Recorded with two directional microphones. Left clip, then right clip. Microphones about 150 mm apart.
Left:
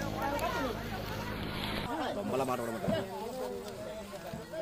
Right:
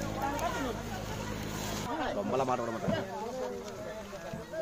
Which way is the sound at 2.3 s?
40° right (ahead or behind).